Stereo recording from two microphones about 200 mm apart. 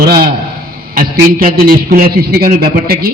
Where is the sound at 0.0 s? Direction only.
50° right (ahead or behind).